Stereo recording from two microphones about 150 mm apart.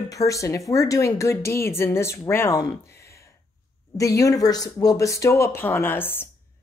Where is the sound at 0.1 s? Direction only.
20° left (ahead or behind).